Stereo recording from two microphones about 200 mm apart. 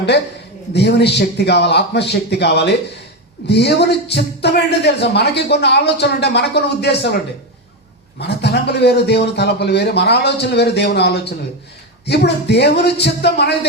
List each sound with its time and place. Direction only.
0.7 s speech: 55° left (ahead or behind)
8.2 s speech: 55° left (ahead or behind)